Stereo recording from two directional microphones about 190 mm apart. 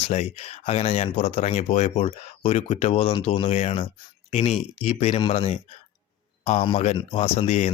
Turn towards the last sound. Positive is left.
turn(degrees=35)  # may be behind; listen again after turning